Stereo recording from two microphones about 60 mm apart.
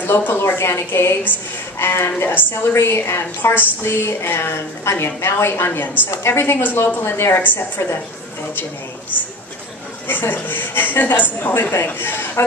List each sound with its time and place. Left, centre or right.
0.0 s a woman's voice: left
7.4 s a woman's voice: left
10.0 s a woman's voice: left